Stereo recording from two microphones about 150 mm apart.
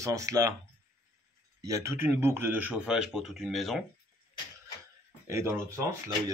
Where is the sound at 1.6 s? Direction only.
20° right (ahead or behind); by 3.8 s centre (ahead or behind).